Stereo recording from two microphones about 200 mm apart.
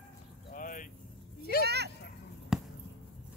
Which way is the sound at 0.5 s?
40° left (ahead or behind).